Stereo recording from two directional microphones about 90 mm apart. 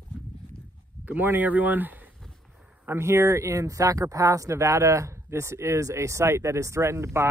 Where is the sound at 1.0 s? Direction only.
20° right (ahead or behind).